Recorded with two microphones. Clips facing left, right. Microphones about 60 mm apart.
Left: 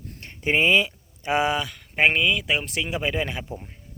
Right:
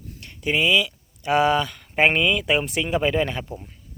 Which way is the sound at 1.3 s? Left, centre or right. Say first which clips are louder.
Right 4 dB; centre.